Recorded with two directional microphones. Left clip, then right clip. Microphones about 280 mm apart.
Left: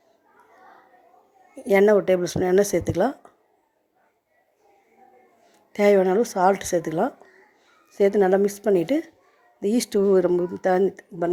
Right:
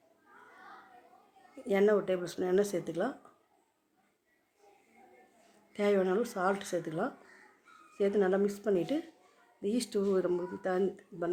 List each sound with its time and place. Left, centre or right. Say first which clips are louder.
1.5 s speech: left 11 dB; left
5.7 s speech: left 12 dB; left